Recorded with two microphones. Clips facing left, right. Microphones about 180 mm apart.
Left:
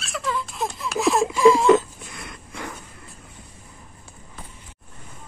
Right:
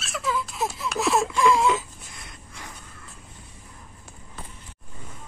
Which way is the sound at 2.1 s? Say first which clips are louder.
Left 6 dB; 70° left (ahead or behind).